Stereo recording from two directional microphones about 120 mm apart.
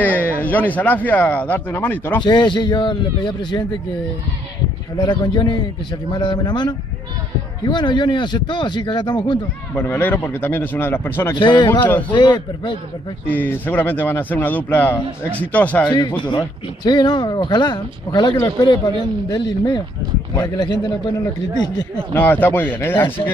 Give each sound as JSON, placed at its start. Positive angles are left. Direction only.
{"t": 0.0, "sound": "a man's voice", "side_deg": 10}
{"t": 2.2, "sound": "speech", "side_deg": 40}
{"t": 4.9, "sound": "speech", "side_deg": 40}
{"t": 9.8, "sound": "a man's voice", "side_deg": 15}
{"t": 11.3, "sound": "speech", "side_deg": 40}
{"t": 13.3, "sound": "a man's voice", "side_deg": 15}
{"t": 15.9, "sound": "speech", "side_deg": 40}
{"t": 22.1, "sound": "a man's voice", "side_deg": 15}